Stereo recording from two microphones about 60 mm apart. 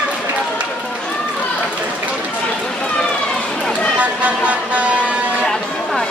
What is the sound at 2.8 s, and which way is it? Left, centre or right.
Run, centre.